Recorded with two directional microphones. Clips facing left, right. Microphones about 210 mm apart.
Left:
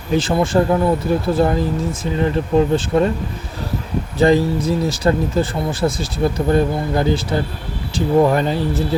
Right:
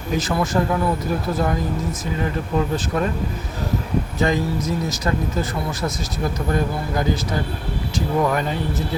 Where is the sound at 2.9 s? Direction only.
25° left (ahead or behind).